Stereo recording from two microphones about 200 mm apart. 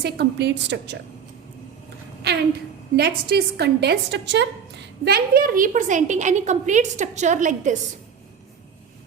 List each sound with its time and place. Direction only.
0.0 s a woman's voice: 55° right (ahead or behind)
2.3 s a woman's voice: 55° right (ahead or behind); by 7.8 s 40° right (ahead or behind)